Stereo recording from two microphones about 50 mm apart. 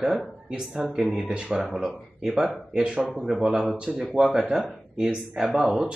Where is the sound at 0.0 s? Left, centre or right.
Centre.